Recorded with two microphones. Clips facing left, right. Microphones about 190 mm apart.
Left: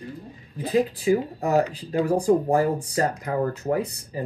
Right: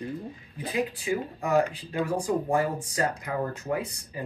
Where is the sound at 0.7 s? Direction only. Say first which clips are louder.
Left 8 dB; 35° left (ahead or behind).